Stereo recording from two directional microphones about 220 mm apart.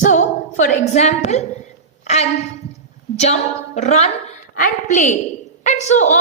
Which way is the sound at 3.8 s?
30° left (ahead or behind).